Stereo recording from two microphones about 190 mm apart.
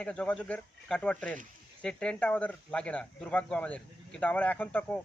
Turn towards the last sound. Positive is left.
turn(degrees=10)  # may be behind; listen again after turning